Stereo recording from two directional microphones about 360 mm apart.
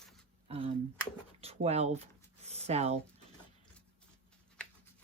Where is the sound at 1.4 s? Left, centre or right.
Centre.